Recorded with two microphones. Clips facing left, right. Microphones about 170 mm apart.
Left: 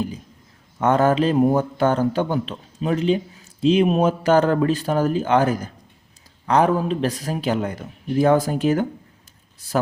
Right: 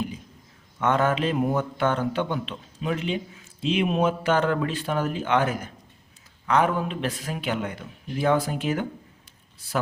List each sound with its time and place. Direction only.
0.8 s speech: 35° left (ahead or behind)